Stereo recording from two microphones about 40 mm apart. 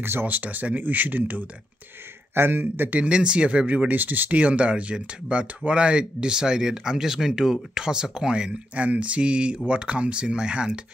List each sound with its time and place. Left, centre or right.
0.0 s speech: right
0.3 s speech: right
2.3 s speech: right
2.9 s speech: right
4.4 s speech: right